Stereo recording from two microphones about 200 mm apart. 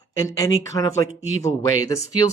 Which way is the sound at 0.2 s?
15° left (ahead or behind).